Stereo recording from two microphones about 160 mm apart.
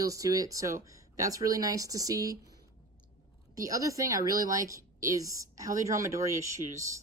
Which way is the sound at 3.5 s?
20° right (ahead or behind).